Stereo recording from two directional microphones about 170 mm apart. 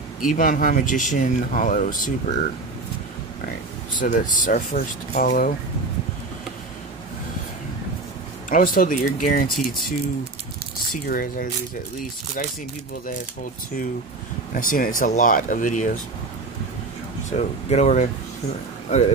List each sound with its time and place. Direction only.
0.2 s speech: 50° left (ahead or behind)
4.0 s speech: 50° left (ahead or behind)
8.5 s speech: 55° left (ahead or behind)
9.6 s speech: centre (ahead or behind)
10.9 s speech: 55° left (ahead or behind)
14.5 s speech: 55° left (ahead or behind)
17.3 s speech: 40° left (ahead or behind)